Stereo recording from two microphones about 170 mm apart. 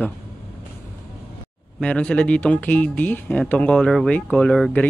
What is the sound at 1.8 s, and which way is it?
Speech, 10° left (ahead or behind).